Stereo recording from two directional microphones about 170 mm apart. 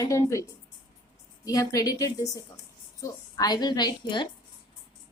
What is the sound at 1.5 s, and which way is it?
Speech, 20° left (ahead or behind).